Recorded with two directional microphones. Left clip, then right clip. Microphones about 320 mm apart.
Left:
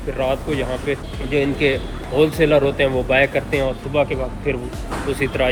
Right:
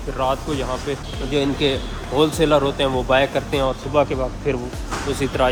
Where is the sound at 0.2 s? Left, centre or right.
Centre.